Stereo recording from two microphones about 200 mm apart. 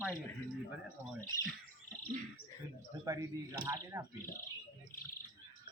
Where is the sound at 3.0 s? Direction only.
15° right (ahead or behind).